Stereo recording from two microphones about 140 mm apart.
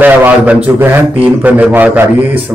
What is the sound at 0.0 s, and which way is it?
A man's voice, 10° right (ahead or behind).